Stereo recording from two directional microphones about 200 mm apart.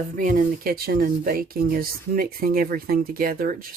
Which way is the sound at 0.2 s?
45° right (ahead or behind).